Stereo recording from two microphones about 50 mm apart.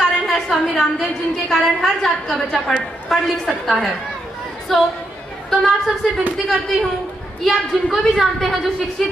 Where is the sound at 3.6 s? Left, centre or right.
Centre.